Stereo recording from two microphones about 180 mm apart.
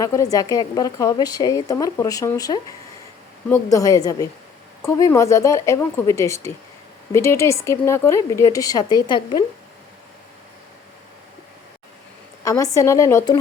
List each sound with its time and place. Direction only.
0.0 s a woman's voice: 20° left (ahead or behind)
12.5 s speech: 20° left (ahead or behind)